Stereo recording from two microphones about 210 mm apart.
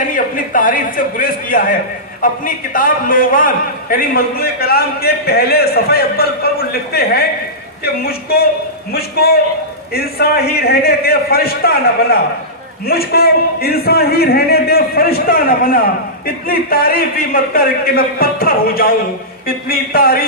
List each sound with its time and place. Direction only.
0.1 s a man's voice: 40° left (ahead or behind)